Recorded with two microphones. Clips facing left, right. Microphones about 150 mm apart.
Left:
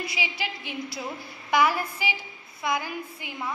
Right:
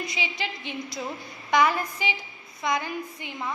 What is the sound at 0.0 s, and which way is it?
A woman's voice, 10° left (ahead or behind).